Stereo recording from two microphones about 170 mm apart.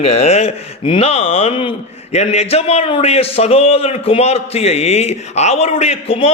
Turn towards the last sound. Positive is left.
turn(degrees=35)  # may be behind; listen again after turning